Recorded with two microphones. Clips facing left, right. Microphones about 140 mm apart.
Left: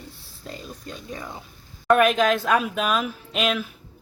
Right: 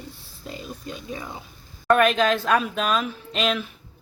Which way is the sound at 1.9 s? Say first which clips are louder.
Left 1 dB; 5° left (ahead or behind).